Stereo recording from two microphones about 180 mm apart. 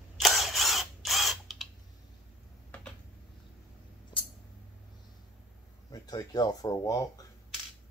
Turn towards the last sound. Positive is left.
turn(degrees=20)  # may be behind; listen again after turning